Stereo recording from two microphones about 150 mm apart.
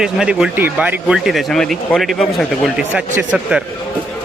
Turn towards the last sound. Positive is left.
turn(degrees=-10)  # may be behind; listen again after turning